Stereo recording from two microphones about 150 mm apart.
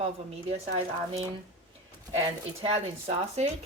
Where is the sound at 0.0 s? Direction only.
40° right (ahead or behind).